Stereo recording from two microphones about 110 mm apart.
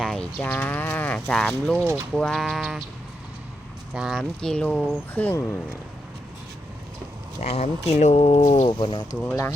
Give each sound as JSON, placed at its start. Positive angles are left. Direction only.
{"t": 0.0, "sound": "cattle", "side_deg": 5}
{"t": 0.3, "sound": "speech", "side_deg": 15}
{"t": 3.9, "sound": "speech", "side_deg": 0}
{"t": 4.9, "sound": "speech", "side_deg": 20}
{"t": 7.4, "sound": "speech", "side_deg": 75}
{"t": 8.8, "sound": "speech", "side_deg": 50}